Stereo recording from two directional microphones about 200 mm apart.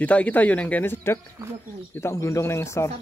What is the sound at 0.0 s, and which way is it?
Speech, 5° left (ahead or behind).